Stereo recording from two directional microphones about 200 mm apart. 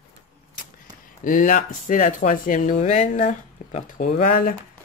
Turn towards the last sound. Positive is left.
turn(degrees=45)  # may be behind; listen again after turning